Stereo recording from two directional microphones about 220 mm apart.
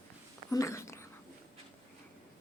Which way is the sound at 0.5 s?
15° left (ahead or behind).